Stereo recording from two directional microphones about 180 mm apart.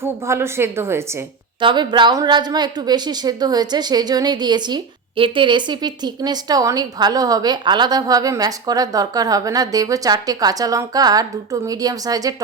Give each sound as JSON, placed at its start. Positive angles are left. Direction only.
{"t": 0.0, "sound": "a woman's voice", "side_deg": -15}
{"t": 1.6, "sound": "a woman's voice", "side_deg": -25}